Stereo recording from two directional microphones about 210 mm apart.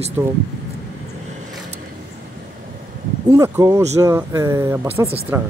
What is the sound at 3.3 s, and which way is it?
Speech, 15° right (ahead or behind).